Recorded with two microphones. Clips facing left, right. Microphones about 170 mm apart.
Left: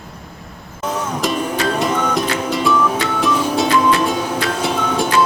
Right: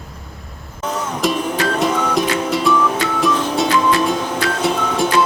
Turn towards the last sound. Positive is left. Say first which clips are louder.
# even
turn(degrees=-5)  # may be behind; listen again after turning